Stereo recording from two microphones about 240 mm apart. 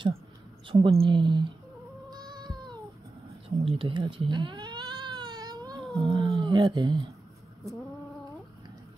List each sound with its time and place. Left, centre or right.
0.7 s speech: right
2.0 s a sound: centre
3.4 s speech: right